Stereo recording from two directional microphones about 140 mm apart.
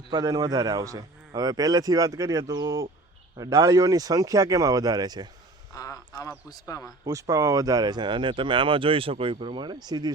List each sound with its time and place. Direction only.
0.1 s a man's voice: 25° right (ahead or behind)
5.7 s a sound: 25° left (ahead or behind)
6.5 s a man's voice: 25° left (ahead or behind)
7.0 s speech: 25° right (ahead or behind)